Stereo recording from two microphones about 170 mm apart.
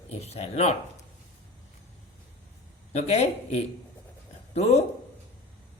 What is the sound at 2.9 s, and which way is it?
A man's voice, 40° left (ahead or behind).